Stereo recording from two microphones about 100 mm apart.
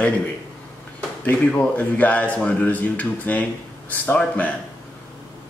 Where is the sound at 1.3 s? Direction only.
15° left (ahead or behind).